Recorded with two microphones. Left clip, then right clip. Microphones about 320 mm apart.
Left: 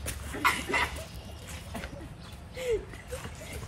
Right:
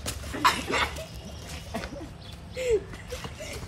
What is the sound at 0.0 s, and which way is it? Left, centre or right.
Chicken, centre.